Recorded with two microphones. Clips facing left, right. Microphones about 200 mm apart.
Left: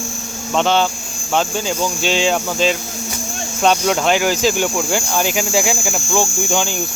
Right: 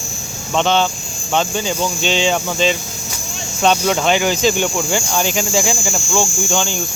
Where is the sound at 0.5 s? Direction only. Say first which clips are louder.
Even; 5° left (ahead or behind).